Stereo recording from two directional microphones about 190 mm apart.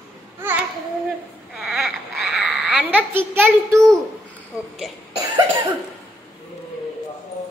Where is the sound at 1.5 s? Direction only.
Centre (ahead or behind).